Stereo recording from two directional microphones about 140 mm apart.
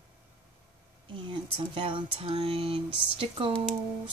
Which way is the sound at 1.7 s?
40° right (ahead or behind).